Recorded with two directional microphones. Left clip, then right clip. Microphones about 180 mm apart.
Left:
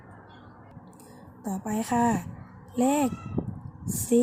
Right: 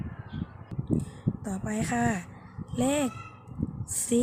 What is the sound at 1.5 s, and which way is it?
Speech, 20° right (ahead or behind).